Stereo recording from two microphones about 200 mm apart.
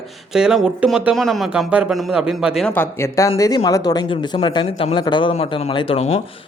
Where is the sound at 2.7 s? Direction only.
10° left (ahead or behind); by 6.2 s 30° left (ahead or behind).